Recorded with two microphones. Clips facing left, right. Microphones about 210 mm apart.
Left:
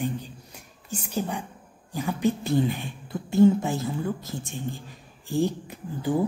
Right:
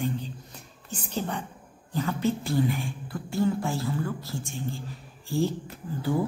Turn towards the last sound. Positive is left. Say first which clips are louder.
# left 2 dB
turn(degrees=15)  # may be behind; listen again after turning